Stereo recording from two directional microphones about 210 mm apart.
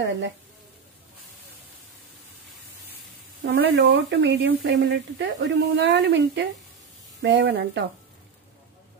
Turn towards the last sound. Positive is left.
turn(degrees=-55)  # may be behind; listen again after turning